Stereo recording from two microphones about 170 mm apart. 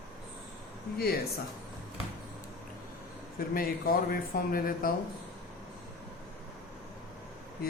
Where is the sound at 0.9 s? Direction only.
65° left (ahead or behind).